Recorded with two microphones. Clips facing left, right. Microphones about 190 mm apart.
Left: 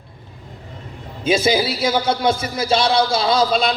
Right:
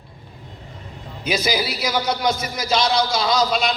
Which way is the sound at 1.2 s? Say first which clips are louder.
Left 5 dB; 25° left (ahead or behind).